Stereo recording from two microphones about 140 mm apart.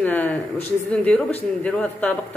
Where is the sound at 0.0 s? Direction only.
10° left (ahead or behind).